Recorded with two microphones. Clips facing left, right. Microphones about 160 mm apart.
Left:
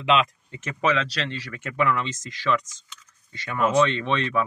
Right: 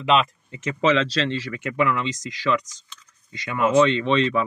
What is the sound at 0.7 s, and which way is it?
Speech, 25° right (ahead or behind).